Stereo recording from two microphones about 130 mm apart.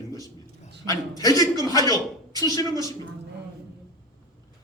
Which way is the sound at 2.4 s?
30° left (ahead or behind).